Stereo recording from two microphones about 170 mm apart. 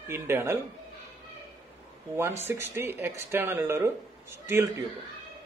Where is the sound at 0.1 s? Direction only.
15° right (ahead or behind).